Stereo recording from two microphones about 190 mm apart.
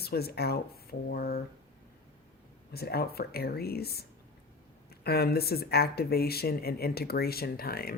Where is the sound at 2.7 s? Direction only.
55° left (ahead or behind).